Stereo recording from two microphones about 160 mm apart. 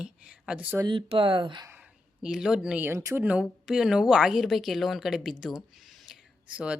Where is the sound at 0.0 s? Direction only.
5° right (ahead or behind).